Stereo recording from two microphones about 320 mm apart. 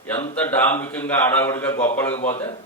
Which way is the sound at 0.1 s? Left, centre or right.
Centre.